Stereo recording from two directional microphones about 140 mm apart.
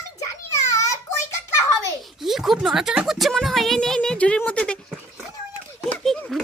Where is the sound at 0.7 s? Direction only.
20° left (ahead or behind).